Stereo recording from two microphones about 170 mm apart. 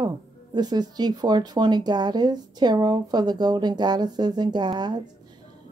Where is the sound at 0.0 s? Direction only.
25° right (ahead or behind).